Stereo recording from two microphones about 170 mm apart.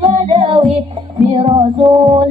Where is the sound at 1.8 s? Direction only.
20° right (ahead or behind).